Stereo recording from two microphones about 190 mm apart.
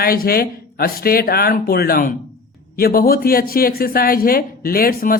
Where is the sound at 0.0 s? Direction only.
50° left (ahead or behind).